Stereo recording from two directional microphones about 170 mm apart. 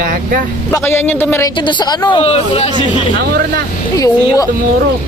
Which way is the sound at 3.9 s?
20° left (ahead or behind).